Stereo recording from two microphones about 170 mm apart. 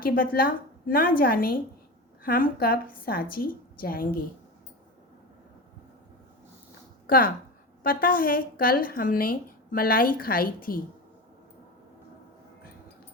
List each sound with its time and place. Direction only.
0.0 s a woman's voice: 60° left (ahead or behind)
7.1 s a woman's voice: 55° left (ahead or behind)